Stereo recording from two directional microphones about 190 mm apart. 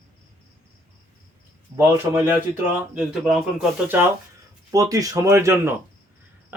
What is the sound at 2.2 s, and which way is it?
Speech, 10° right (ahead or behind).